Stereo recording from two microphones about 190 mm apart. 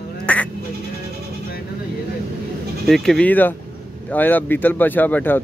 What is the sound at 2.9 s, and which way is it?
Speech, centre (ahead or behind).